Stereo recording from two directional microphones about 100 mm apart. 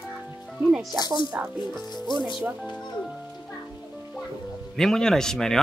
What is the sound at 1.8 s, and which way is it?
Speech, 45° left (ahead or behind).